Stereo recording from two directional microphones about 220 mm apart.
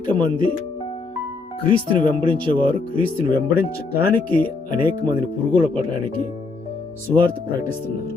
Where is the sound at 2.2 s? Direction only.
25° right (ahead or behind).